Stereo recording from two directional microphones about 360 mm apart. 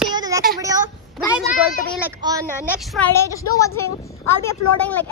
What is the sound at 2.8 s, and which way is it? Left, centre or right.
A woman's voice, centre.